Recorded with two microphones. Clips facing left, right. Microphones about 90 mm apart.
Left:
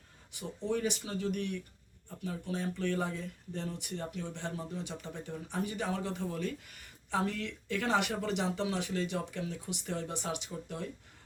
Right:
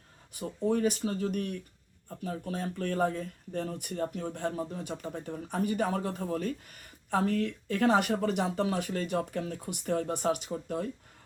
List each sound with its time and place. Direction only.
0.3 s speech: 45° right (ahead or behind)